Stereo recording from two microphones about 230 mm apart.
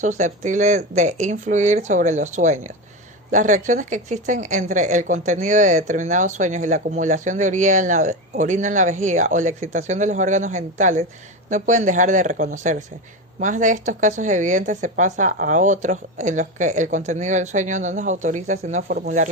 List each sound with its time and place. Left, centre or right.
0.0 s a woman's voice: right